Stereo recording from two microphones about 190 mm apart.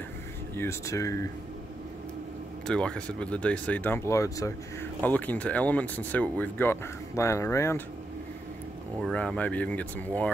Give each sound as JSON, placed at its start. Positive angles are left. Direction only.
{"t": 0.6, "sound": "speech", "side_deg": 15}
{"t": 2.6, "sound": "speech", "side_deg": 5}
{"t": 9.0, "sound": "speech", "side_deg": 5}